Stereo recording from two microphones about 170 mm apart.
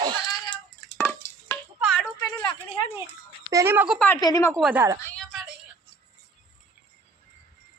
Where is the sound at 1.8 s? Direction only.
5° left (ahead or behind).